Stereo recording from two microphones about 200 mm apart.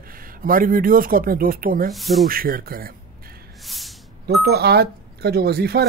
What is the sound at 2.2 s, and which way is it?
Speech, 45° right (ahead or behind).